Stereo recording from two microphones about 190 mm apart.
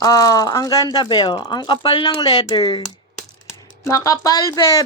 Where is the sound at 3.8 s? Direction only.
15° left (ahead or behind).